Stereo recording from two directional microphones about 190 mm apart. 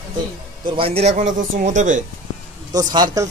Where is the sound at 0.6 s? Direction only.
30° right (ahead or behind).